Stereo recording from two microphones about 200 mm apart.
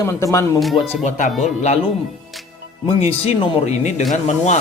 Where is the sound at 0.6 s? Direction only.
Centre (ahead or behind).